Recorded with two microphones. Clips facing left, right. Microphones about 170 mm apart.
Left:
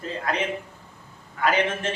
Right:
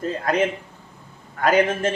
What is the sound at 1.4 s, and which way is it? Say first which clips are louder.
Speech: right 5 dB; 45° right (ahead or behind).